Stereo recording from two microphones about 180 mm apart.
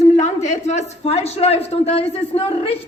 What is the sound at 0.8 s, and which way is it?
A man's voice, 35° left (ahead or behind).